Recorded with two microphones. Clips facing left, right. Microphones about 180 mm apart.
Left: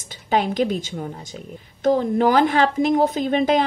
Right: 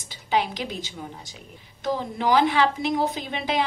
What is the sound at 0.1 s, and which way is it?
A woman's voice, 50° left (ahead or behind).